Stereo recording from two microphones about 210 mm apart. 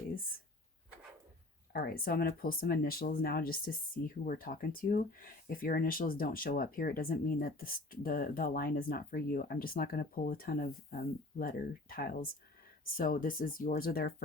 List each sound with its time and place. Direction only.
1.7 s speech: 45° left (ahead or behind)